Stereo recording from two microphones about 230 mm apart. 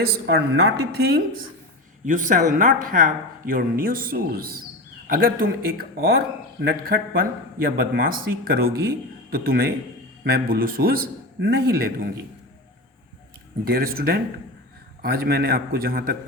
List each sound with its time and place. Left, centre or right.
0.0 s a man's voice: right
13.7 s a man's voice: right